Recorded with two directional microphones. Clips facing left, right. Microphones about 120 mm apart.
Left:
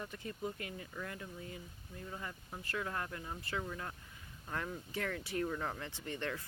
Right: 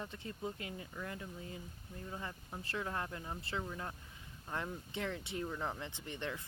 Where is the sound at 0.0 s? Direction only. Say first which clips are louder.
Left 1 dB; 25° right (ahead or behind).